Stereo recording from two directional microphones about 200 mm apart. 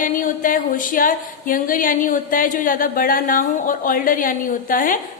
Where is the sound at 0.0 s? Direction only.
40° left (ahead or behind).